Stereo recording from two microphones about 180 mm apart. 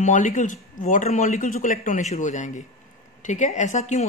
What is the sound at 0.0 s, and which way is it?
Speech, 45° left (ahead or behind).